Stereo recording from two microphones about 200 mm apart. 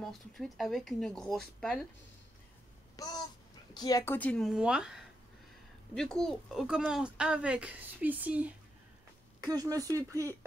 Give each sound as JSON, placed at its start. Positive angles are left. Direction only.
{"t": 0.0, "sound": "speech", "side_deg": 0}
{"t": 3.0, "sound": "speech", "side_deg": 20}
{"t": 9.4, "sound": "speech", "side_deg": -20}